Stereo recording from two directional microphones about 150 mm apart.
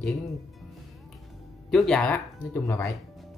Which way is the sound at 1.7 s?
5° left (ahead or behind).